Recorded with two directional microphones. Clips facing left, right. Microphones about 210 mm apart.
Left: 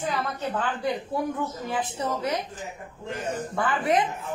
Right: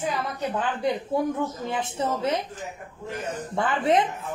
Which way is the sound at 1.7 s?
25° right (ahead or behind).